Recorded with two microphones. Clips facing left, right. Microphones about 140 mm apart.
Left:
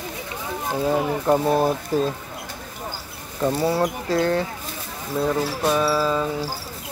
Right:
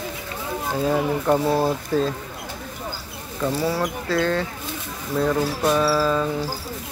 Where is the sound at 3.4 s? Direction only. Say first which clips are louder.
Left 2 dB; 25° left (ahead or behind).